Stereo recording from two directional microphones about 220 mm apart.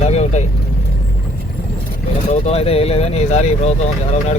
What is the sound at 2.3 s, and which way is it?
Speech, 25° left (ahead or behind).